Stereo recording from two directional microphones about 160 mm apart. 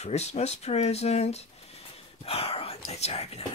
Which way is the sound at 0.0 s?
45° left (ahead or behind).